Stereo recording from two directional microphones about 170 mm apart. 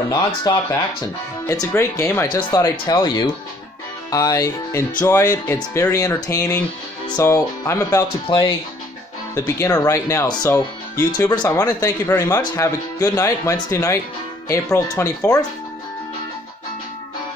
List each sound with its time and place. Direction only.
0.1 s speech: 25° left (ahead or behind)